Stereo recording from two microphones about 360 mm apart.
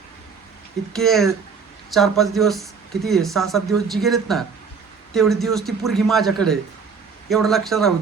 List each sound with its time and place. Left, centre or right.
0.9 s speech: centre